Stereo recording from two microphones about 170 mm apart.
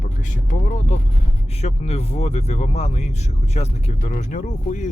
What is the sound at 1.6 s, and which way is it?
Speech, 40° left (ahead or behind).